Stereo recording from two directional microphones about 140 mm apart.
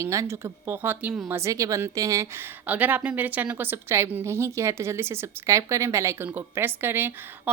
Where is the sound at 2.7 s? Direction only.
15° right (ahead or behind).